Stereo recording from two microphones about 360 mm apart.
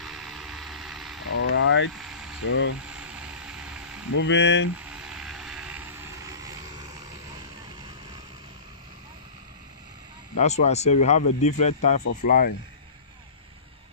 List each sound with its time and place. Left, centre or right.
0.0 s vehicle: centre
1.3 s speech: left
2.0 s vehicle: centre
2.4 s speech: left
2.8 s vehicle: centre
4.1 s speech: left
4.7 s vehicle: centre
10.4 s speech: centre